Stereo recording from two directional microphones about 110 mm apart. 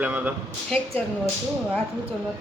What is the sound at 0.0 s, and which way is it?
Speech, 15° right (ahead or behind).